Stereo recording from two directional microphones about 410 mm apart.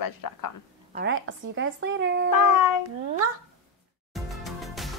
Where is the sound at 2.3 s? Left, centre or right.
Left.